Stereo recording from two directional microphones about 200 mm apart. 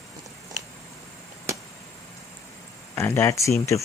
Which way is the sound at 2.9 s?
15° left (ahead or behind).